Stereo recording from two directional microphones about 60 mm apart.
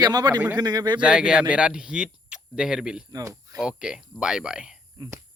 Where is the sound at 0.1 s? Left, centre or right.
Right.